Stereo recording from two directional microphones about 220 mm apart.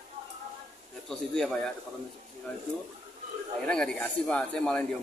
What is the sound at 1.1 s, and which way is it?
Speech, centre (ahead or behind).